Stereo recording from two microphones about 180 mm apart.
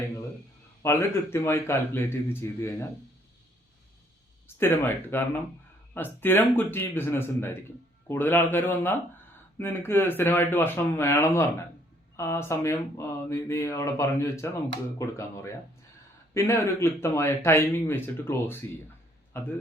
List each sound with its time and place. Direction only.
0.8 s speech: 15° left (ahead or behind)
4.4 s speech: 15° left (ahead or behind)